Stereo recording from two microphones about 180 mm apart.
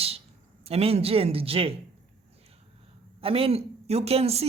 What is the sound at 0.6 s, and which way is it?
Speech, 35° right (ahead or behind).